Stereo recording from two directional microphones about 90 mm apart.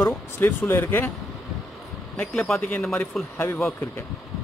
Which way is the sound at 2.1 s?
5° left (ahead or behind).